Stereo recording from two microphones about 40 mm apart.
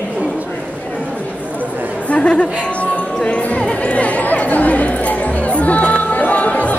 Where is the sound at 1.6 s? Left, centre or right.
Right.